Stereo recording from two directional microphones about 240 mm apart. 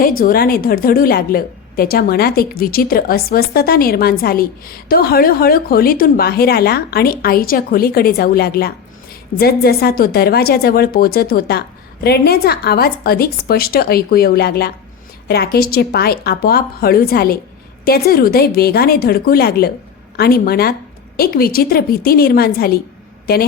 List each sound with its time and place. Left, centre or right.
0.0 s a woman's voice: left